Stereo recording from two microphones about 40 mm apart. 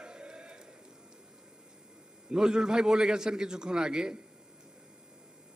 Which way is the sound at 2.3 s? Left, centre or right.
Right.